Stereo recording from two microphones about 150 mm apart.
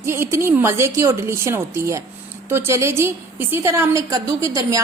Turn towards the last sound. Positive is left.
turn(degrees=-20)  # may be behind; listen again after turning